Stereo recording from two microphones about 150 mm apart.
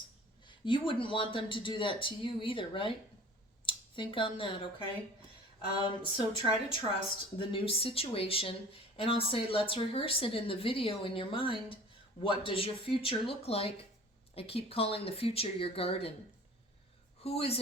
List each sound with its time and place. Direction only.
0.4 s speech: 35° left (ahead or behind)
5.8 s speech: 35° left (ahead or behind)
17.2 s speech: 40° left (ahead or behind)